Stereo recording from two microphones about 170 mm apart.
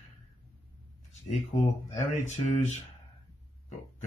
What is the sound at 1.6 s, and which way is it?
Speech, 40° left (ahead or behind).